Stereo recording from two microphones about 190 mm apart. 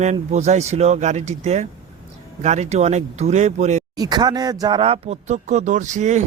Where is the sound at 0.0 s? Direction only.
40° right (ahead or behind).